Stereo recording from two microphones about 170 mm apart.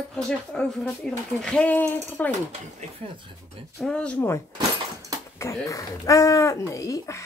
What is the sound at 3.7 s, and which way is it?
Speech, 5° left (ahead or behind).